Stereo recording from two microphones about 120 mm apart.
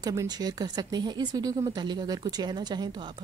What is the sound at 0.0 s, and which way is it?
A woman's voice, 30° right (ahead or behind).